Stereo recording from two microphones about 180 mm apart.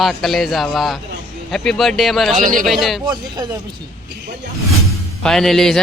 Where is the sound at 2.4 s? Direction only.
45° right (ahead or behind).